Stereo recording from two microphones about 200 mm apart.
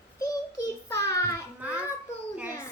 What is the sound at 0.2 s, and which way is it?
Child singing, 15° left (ahead or behind).